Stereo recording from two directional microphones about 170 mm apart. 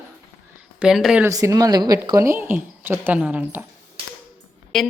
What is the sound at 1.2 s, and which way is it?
A woman's voice, 20° right (ahead or behind).